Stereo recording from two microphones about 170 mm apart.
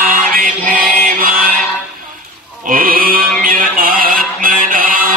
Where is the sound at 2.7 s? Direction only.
55° right (ahead or behind).